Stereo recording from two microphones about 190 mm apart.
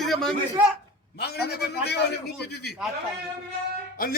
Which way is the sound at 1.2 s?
60° left (ahead or behind).